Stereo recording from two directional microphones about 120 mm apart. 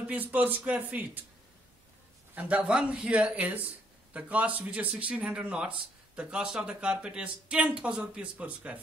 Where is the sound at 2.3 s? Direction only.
10° right (ahead or behind).